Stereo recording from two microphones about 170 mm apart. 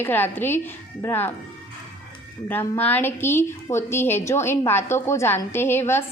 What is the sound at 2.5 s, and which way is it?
A woman's voice, 10° left (ahead or behind).